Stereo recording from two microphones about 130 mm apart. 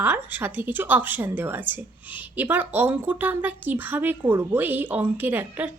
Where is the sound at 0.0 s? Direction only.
15° right (ahead or behind).